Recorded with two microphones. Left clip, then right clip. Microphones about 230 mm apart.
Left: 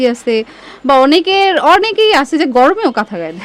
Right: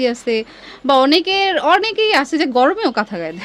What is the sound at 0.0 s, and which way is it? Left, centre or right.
A woman's voice, centre.